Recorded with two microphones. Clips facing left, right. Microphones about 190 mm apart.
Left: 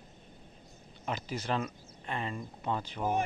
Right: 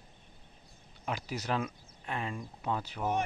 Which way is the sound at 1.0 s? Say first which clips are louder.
Left 1 dB; 10° right (ahead or behind).